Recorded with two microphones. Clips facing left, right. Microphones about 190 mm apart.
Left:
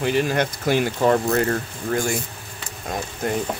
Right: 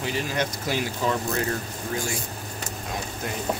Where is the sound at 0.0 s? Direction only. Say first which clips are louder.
Left 7 dB; 60° left (ahead or behind).